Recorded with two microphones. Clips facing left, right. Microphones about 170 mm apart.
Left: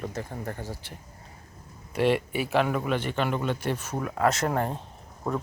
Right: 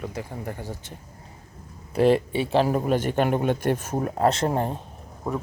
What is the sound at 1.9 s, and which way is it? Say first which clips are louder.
A man's voice: right 5 dB; 35° right (ahead or behind).